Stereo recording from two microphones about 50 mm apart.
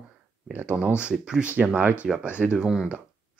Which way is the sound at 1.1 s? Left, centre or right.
Right.